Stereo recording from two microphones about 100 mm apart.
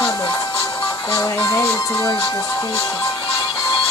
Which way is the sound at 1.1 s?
35° left (ahead or behind).